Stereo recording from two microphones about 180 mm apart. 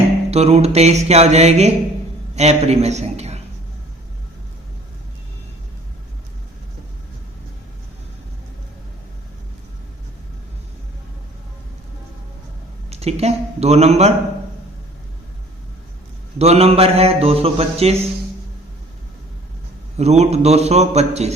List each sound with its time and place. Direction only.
0.3 s a man's voice: 35° right (ahead or behind)
12.9 s a man's voice: 35° right (ahead or behind)
16.4 s a man's voice: 35° right (ahead or behind)
20.0 s a man's voice: 35° right (ahead or behind)